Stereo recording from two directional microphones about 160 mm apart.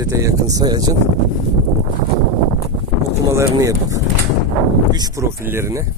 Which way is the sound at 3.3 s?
20° right (ahead or behind).